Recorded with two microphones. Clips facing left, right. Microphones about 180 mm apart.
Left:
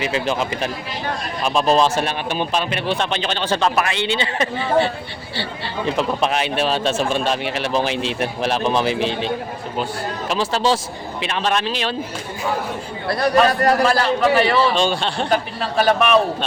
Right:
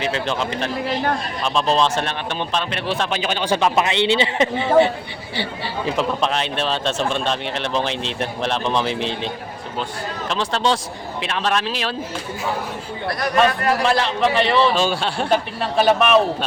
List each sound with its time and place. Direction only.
0.0 s speech: 5° left (ahead or behind); by 3.7 s 10° right (ahead or behind)
3.8 s a man's voice: 25° right (ahead or behind)
5.8 s a man's voice: 5° left (ahead or behind)
13.1 s a man's voice: 30° left (ahead or behind)
14.2 s a man's voice: 5° left (ahead or behind)